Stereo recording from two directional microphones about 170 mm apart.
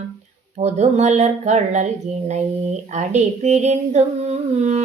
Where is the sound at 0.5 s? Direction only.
40° right (ahead or behind).